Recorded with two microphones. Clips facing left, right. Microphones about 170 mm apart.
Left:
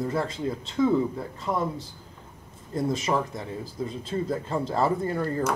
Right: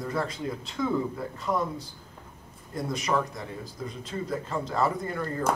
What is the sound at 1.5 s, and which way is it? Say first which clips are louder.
Speech: even; 25° left (ahead or behind).